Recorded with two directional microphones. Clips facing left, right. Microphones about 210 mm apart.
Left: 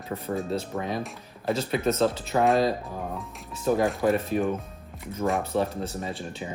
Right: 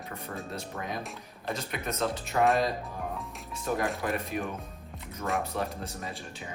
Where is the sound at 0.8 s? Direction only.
30° left (ahead or behind).